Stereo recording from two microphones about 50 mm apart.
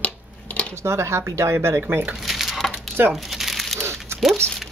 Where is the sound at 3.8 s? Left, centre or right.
Right.